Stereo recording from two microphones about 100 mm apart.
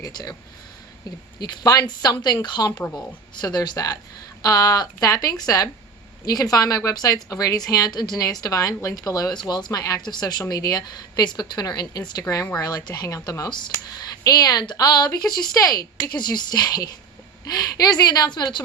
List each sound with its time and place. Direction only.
0.0 s a woman's voice: 40° left (ahead or behind)
1.4 s a woman's voice: 40° left (ahead or behind)